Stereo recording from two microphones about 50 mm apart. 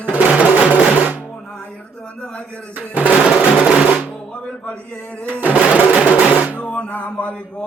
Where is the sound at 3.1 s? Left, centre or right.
Centre.